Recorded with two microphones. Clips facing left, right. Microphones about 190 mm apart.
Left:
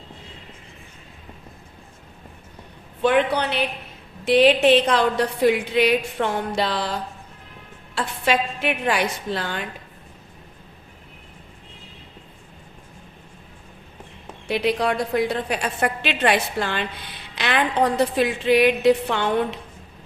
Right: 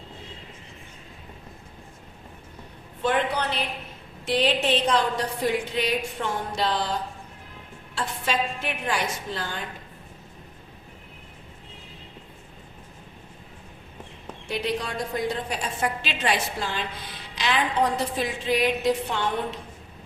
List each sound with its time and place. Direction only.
3.0 s a woman's voice: 70° left (ahead or behind)
7.9 s a woman's voice: 70° left (ahead or behind)
14.4 s a woman's voice: 70° left (ahead or behind)